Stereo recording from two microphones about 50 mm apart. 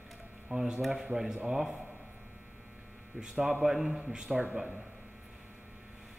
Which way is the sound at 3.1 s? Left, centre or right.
Centre.